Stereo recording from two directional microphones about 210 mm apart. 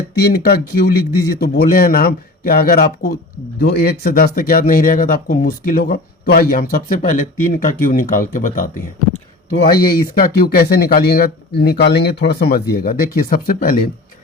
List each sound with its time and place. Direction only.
0.1 s speech: 50° left (ahead or behind)